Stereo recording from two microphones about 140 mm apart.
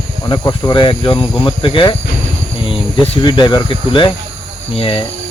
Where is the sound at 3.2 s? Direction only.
35° left (ahead or behind).